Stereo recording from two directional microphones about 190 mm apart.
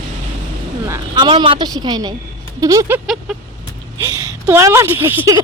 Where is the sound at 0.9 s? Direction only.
25° right (ahead or behind).